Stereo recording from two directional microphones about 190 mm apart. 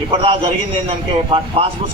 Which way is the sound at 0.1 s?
30° right (ahead or behind).